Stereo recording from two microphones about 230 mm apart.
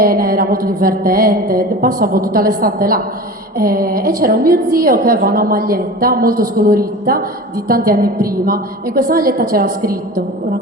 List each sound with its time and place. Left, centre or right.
0.0 s mantra: right